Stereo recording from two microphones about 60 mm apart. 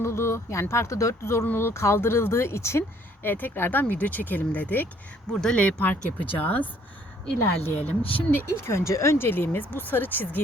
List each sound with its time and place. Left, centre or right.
0.0 s speech: left
3.2 s speech: left
5.3 s speech: centre; by 8.4 s left
8.4 s speech: left